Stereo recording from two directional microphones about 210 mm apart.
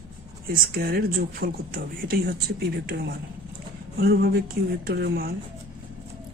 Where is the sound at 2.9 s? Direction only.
50° right (ahead or behind).